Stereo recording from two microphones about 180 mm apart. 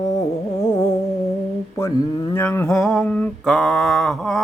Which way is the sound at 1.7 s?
20° left (ahead or behind).